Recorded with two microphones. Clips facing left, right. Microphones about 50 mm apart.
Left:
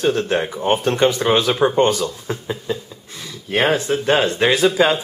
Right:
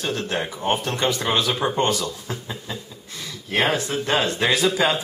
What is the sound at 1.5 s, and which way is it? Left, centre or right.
Speech, centre.